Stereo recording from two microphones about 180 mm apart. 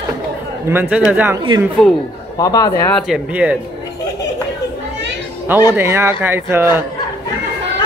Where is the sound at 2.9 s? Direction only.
Centre (ahead or behind).